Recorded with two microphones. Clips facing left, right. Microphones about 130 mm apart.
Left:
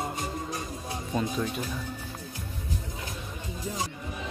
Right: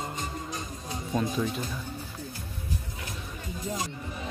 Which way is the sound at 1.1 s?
5° left (ahead or behind).